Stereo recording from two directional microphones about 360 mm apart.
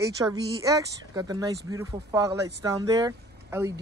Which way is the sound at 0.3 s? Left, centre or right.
Centre.